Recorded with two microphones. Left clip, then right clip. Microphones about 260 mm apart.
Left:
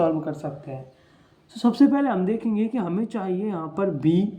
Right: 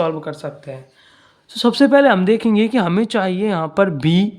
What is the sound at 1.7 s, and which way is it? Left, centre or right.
Speech, right.